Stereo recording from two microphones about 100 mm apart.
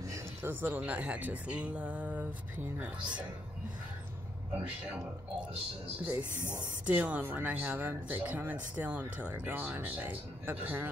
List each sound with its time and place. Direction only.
0.0 s a sound: 30° right (ahead or behind)
0.5 s speech: 20° right (ahead or behind)
4.6 s speech: 15° right (ahead or behind)